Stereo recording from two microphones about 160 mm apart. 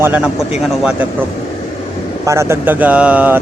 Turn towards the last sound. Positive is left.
turn(degrees=-10)  # may be behind; listen again after turning